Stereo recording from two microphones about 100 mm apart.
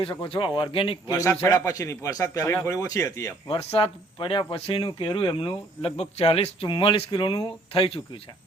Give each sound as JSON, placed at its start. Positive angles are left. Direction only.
{"t": 0.0, "sound": "speech", "side_deg": 60}
{"t": 1.1, "sound": "a man's voice", "side_deg": 35}
{"t": 3.6, "sound": "speech", "side_deg": 80}
{"t": 4.9, "sound": "speech", "side_deg": 50}
{"t": 7.7, "sound": "speech", "side_deg": 65}